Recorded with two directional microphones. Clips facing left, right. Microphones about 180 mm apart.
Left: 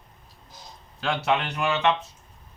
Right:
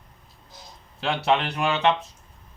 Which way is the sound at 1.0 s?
30° right (ahead or behind).